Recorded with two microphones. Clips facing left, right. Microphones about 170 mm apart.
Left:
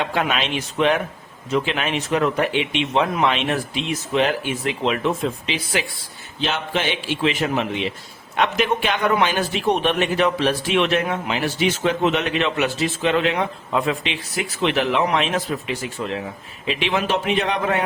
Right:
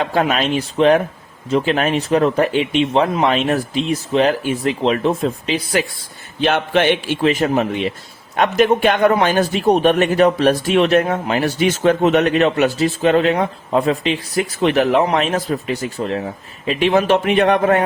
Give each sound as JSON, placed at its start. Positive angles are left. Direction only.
{"t": 0.0, "sound": "speech", "side_deg": -40}
{"t": 6.4, "sound": "a man's voice", "side_deg": -60}